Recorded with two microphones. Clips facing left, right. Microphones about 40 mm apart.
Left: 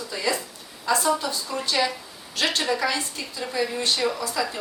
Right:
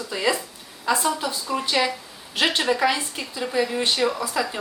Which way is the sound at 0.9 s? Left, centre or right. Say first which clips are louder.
Even; centre.